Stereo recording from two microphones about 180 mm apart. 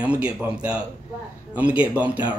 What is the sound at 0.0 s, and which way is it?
Speech, 5° right (ahead or behind).